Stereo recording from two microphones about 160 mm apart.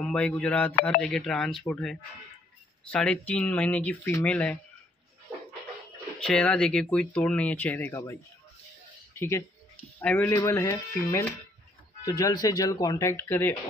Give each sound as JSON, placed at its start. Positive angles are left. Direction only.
{"t": 0.0, "sound": "speech", "side_deg": 10}
{"t": 6.1, "sound": "speech", "side_deg": 5}
{"t": 9.9, "sound": "speech", "side_deg": 10}